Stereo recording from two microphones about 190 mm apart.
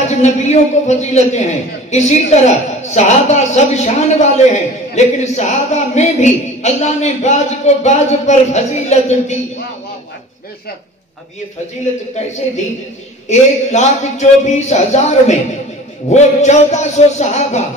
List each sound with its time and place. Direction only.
0.1 s a man's voice: 35° left (ahead or behind)
13.3 s a man's voice: 35° left (ahead or behind)